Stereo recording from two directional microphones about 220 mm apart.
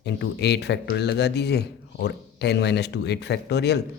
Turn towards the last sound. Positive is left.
turn(degrees=50)  # may be behind; listen again after turning